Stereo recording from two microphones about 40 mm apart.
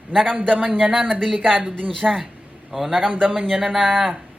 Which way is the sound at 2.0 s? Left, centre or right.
Right.